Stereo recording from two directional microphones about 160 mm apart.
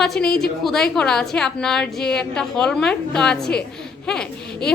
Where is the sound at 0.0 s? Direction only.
5° left (ahead or behind).